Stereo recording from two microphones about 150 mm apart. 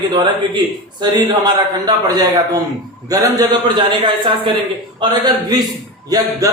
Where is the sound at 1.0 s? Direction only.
30° right (ahead or behind).